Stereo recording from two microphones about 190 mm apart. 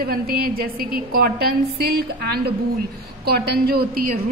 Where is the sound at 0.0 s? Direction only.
55° right (ahead or behind).